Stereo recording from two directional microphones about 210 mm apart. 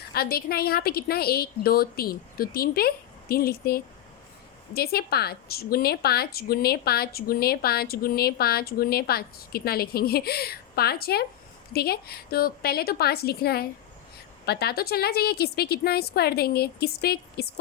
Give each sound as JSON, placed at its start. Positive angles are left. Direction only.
{"t": 0.1, "sound": "a woman's voice", "side_deg": 45}